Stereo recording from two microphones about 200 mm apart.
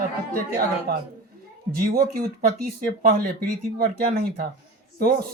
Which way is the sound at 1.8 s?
50° right (ahead or behind).